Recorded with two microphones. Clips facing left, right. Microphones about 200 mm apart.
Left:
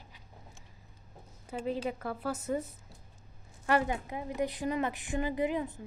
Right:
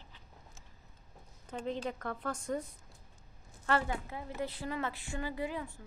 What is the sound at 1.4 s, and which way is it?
A woman's voice, 5° left (ahead or behind).